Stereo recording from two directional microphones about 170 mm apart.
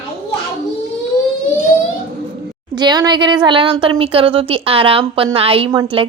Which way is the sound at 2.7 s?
25° right (ahead or behind).